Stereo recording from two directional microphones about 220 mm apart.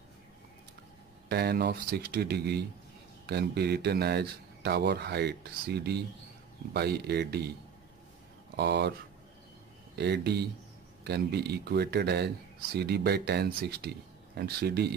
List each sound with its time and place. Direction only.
1.3 s speech: 45° right (ahead or behind)
8.5 s speech: 50° right (ahead or behind)
9.9 s speech: 50° right (ahead or behind)